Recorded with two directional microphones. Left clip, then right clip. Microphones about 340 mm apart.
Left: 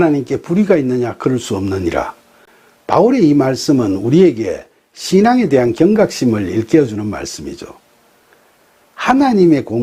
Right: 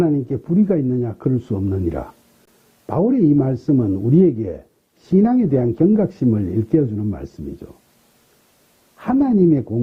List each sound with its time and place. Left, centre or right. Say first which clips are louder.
0.0 s speech: left 5 dB; centre
9.0 s speech: left 6 dB; centre